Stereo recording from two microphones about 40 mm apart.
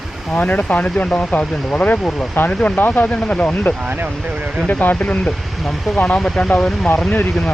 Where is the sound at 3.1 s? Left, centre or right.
Left.